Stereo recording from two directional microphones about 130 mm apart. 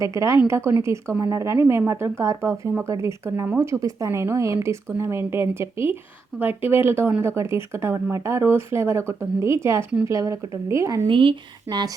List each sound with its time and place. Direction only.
0.0 s a woman's voice: 25° right (ahead or behind)
11.1 s speech: 40° right (ahead or behind)